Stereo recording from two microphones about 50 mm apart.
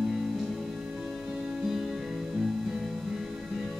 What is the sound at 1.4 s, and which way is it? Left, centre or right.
Music, centre.